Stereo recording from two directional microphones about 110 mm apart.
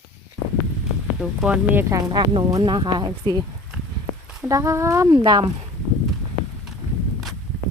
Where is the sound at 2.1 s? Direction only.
40° right (ahead or behind).